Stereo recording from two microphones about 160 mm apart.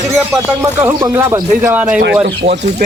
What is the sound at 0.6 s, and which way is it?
Speech, 20° right (ahead or behind).